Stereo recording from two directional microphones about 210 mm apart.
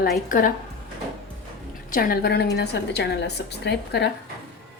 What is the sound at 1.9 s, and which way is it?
A woman's voice, 45° left (ahead or behind).